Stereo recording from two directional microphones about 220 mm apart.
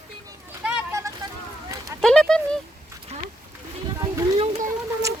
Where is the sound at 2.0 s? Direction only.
Centre (ahead or behind).